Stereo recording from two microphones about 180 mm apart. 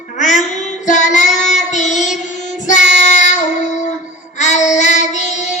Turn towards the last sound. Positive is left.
turn(degrees=40)  # may be behind; listen again after turning